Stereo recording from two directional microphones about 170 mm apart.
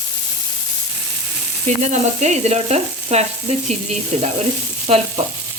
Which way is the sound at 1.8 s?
40° right (ahead or behind).